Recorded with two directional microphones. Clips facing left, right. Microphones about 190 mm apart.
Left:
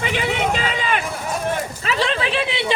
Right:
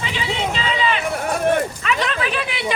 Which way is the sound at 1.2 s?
60° right (ahead or behind).